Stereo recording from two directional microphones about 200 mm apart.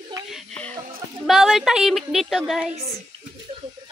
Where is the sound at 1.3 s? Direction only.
Centre (ahead or behind).